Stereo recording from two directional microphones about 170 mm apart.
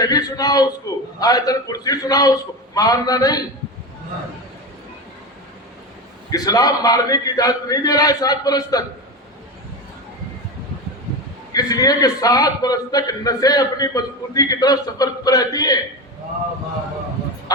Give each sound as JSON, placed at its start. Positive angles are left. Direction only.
{"t": 0.0, "sound": "a man's voice", "side_deg": 20}
{"t": 6.3, "sound": "a man's voice", "side_deg": 20}
{"t": 11.5, "sound": "a man's voice", "side_deg": 20}